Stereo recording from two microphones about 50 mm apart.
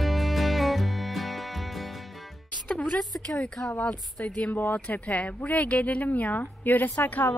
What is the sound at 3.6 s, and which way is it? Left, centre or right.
Speech, left.